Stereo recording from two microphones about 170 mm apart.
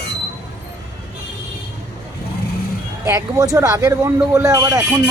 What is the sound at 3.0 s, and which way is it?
Speech, 20° right (ahead or behind).